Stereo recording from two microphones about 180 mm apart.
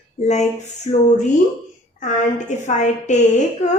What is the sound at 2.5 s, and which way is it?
Speech, 40° left (ahead or behind).